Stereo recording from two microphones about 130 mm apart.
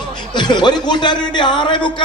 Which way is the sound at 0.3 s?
35° left (ahead or behind).